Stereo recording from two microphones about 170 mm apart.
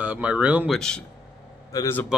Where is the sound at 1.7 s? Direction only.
15° left (ahead or behind).